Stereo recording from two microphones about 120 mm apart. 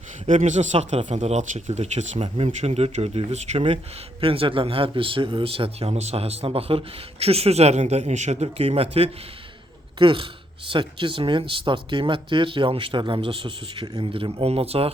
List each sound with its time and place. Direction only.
0.3 s speech: 85° right; by 3.6 s 70° right (ahead or behind)
4.2 s speech: 50° right (ahead or behind)